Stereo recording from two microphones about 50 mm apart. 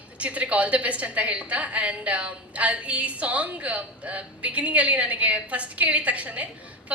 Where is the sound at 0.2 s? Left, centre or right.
Right.